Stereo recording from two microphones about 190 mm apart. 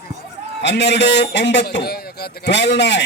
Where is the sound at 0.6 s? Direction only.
65° left (ahead or behind).